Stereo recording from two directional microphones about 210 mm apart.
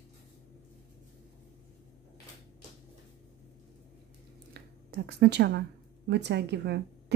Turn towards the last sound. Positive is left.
turn(degrees=-50)  # may be behind; listen again after turning